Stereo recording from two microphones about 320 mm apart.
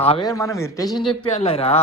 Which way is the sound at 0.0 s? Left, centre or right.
Centre.